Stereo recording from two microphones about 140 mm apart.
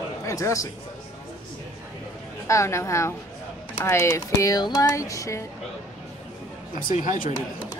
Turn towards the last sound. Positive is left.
turn(degrees=70)  # may be behind; listen again after turning